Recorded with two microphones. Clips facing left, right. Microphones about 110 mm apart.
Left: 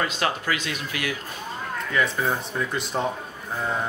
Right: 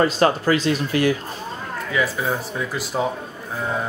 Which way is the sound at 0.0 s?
35° right (ahead or behind).